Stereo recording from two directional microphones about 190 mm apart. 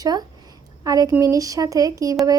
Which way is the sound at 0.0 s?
20° right (ahead or behind).